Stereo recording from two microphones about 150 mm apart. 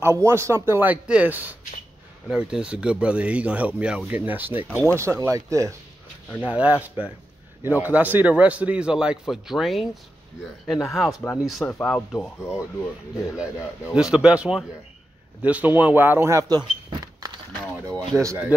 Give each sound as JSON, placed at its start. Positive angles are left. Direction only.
{"t": 0.0, "sound": "a man's voice", "side_deg": -15}
{"t": 6.4, "sound": "a man's voice", "side_deg": -10}
{"t": 11.1, "sound": "speech", "side_deg": 20}
{"t": 11.6, "sound": "speech", "side_deg": 5}
{"t": 13.9, "sound": "a man's voice", "side_deg": -5}